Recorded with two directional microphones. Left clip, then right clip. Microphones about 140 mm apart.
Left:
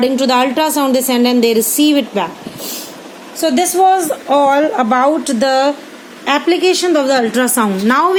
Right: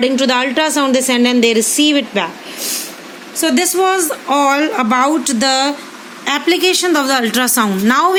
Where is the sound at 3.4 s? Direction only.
35° right (ahead or behind).